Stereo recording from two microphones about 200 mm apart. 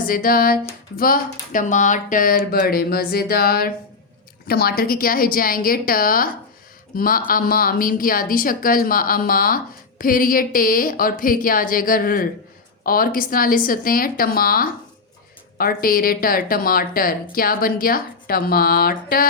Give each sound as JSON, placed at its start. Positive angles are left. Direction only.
{"t": 0.1, "sound": "speech", "side_deg": 45}